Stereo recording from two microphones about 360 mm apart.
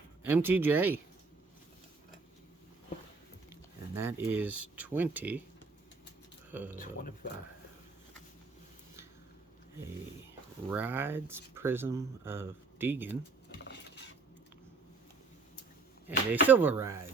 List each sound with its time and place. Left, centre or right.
0.2 s speech: centre
3.9 s speech: centre
6.7 s speech: left
10.7 s speech: centre
16.0 s speech: centre